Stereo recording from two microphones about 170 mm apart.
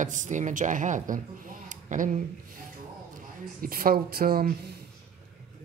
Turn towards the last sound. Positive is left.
turn(degrees=-60)  # may be behind; listen again after turning